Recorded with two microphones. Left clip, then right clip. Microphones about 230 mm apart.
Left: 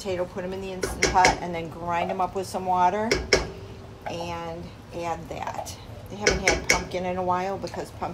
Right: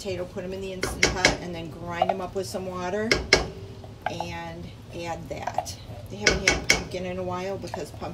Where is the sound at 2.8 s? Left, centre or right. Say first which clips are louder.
Left 6 dB; left.